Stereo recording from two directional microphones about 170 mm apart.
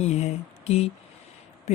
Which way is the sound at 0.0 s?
40° left (ahead or behind).